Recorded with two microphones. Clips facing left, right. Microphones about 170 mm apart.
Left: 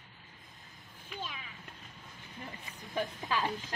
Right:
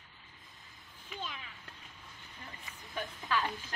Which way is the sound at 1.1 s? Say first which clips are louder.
Even; 5° left (ahead or behind).